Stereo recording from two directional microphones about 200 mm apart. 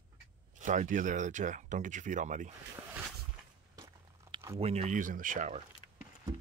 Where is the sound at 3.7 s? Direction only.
20° right (ahead or behind).